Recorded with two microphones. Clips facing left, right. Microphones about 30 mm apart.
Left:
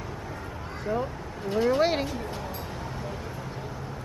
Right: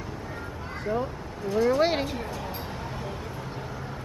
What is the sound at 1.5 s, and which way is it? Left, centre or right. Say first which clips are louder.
Speech: right 1 dB; right.